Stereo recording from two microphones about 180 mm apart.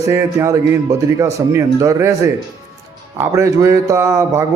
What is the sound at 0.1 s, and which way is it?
Speech, 15° right (ahead or behind).